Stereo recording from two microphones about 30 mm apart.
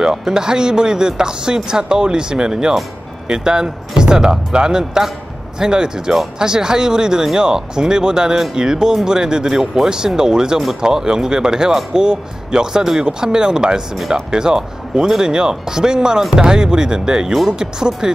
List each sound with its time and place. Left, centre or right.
0.0 s speech: right